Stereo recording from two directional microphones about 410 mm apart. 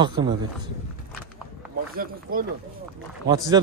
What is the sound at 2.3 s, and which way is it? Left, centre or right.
Speech, right.